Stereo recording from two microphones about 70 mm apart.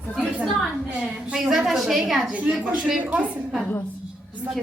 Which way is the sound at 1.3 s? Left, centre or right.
Centre.